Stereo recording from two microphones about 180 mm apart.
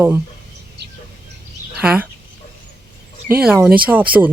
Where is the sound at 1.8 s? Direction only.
5° right (ahead or behind).